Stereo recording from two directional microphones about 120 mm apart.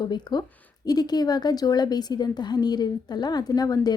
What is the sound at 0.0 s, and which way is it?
A woman's voice, 35° left (ahead or behind).